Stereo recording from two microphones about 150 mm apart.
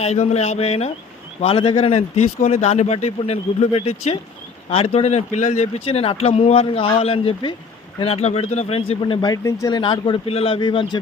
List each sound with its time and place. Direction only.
0.0 s speech: 45° left (ahead or behind)